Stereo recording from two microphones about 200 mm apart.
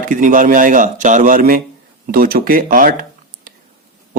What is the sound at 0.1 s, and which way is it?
A man's voice, 40° right (ahead or behind).